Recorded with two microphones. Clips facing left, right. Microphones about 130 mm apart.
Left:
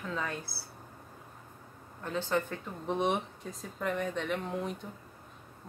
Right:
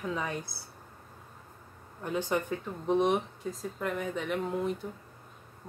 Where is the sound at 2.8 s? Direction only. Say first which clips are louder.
Right 4 dB; centre (ahead or behind).